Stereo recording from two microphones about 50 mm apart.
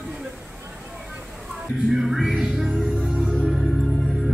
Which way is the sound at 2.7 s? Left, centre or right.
Centre.